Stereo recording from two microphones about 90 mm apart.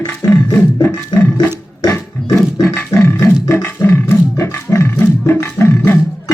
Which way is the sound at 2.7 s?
25° left (ahead or behind).